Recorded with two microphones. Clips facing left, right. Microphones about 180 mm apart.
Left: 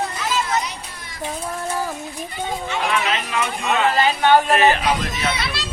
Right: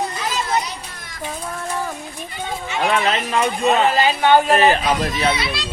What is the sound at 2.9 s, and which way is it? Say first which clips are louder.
Speech: right 6 dB; 35° right (ahead or behind).